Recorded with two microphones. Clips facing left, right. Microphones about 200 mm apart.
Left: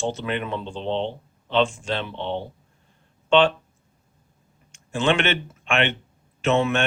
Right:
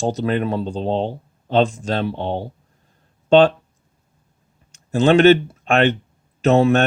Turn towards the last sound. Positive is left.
turn(degrees=-35)  # may be behind; listen again after turning